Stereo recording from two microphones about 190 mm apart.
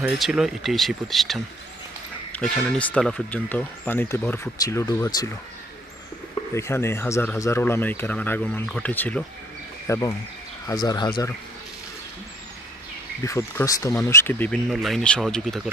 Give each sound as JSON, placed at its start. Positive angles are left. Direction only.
{"t": 0.0, "sound": "speech", "side_deg": -5}
{"t": 6.5, "sound": "speech", "side_deg": 15}
{"t": 13.2, "sound": "speech", "side_deg": 15}